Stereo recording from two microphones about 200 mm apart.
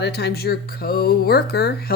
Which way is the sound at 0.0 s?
55° left (ahead or behind).